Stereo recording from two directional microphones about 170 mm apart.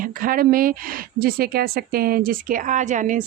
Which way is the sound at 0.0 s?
55° right (ahead or behind).